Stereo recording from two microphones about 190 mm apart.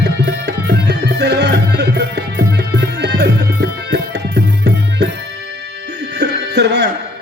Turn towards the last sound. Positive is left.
turn(degrees=-65)  # may be behind; listen again after turning